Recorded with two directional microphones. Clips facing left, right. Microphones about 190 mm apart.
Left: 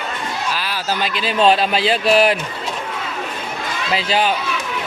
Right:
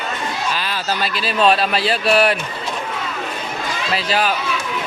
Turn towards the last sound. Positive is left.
turn(degrees=25)  # may be behind; listen again after turning